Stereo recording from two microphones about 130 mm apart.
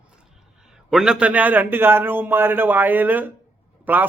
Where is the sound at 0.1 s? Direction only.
5° right (ahead or behind).